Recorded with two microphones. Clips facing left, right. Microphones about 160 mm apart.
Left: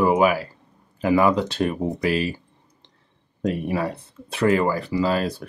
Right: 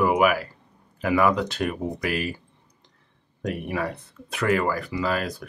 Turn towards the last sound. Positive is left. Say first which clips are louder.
# left 4 dB
turn(degrees=30)  # may be behind; listen again after turning